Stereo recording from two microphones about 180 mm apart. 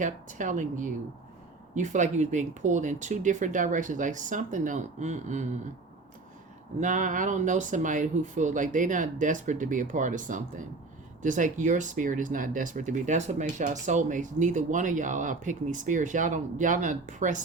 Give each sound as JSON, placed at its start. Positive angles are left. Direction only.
{"t": 0.0, "sound": "speech", "side_deg": -45}
{"t": 6.7, "sound": "speech", "side_deg": -45}